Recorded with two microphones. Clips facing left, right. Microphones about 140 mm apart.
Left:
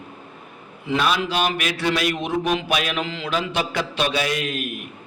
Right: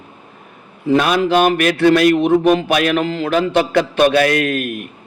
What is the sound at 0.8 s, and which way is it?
A man's voice, 50° right (ahead or behind).